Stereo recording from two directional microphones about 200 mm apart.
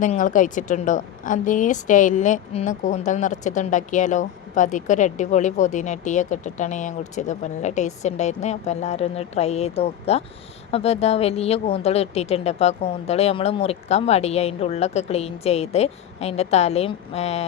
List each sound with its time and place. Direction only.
0.0 s a woman's voice: 40° left (ahead or behind)